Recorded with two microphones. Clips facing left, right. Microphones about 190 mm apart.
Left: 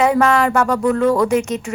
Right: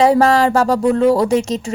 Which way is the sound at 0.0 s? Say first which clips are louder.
Right 3 dB; 35° right (ahead or behind).